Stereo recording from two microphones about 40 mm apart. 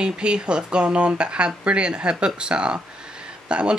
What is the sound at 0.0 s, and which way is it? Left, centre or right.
Speech, right.